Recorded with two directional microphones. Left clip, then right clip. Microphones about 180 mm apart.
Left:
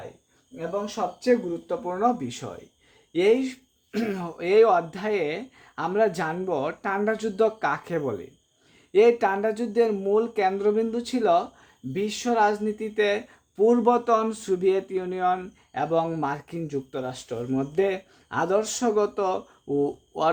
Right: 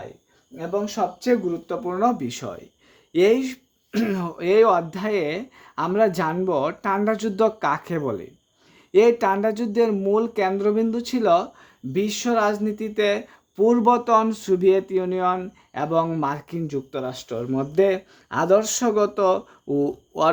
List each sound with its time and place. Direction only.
0.9 s speech: 50° right (ahead or behind)